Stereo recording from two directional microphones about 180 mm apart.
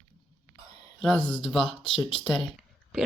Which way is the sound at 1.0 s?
Centre (ahead or behind).